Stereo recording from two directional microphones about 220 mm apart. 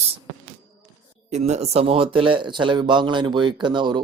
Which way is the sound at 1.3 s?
30° right (ahead or behind).